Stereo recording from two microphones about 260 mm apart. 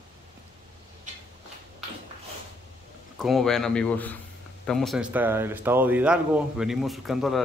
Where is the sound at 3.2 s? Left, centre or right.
Centre.